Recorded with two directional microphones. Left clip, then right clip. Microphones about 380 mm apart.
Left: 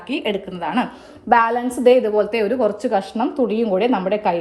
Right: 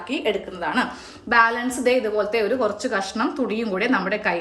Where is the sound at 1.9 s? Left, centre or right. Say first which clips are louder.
Left 5 dB; centre.